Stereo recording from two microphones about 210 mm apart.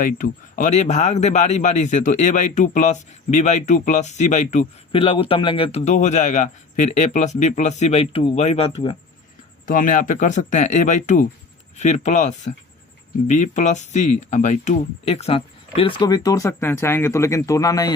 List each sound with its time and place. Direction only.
0.0 s a man's voice: 40° left (ahead or behind)
9.6 s a man's voice: 40° left (ahead or behind); by 17.9 s 15° left (ahead or behind)